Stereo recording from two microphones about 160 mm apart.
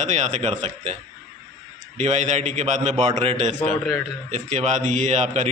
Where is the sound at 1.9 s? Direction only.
45° right (ahead or behind).